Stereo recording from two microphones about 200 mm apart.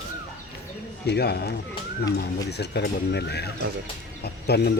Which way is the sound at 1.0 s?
55° left (ahead or behind).